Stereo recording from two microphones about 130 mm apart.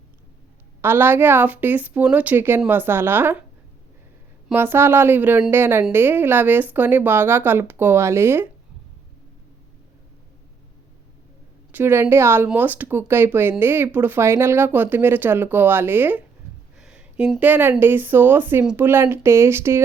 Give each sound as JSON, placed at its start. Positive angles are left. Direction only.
{"t": 0.8, "sound": "speech", "side_deg": -15}
{"t": 4.5, "sound": "speech", "side_deg": -15}
{"t": 11.7, "sound": "speech", "side_deg": -15}